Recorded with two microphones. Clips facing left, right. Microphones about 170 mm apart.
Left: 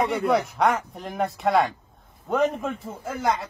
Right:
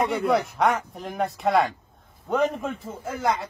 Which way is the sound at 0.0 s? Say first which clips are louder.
Even; centre (ahead or behind).